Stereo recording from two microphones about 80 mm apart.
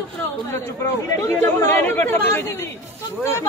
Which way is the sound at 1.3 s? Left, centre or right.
Left.